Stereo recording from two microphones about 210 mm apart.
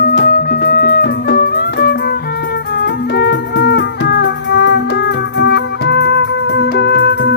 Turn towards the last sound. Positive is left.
turn(degrees=50)  # may be behind; listen again after turning